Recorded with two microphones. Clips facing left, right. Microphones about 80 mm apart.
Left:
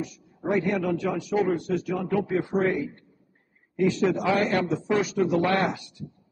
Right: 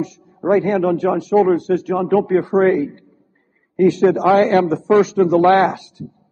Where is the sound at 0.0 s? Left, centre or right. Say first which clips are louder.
Right 10 dB; right.